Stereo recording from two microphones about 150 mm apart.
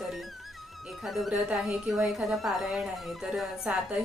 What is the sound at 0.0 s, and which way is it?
Music, centre (ahead or behind).